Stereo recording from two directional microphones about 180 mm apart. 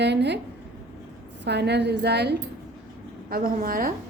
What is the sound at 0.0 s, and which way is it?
Speech, 70° right (ahead or behind).